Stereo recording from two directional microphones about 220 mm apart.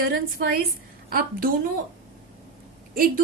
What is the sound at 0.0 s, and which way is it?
Speech, 45° right (ahead or behind).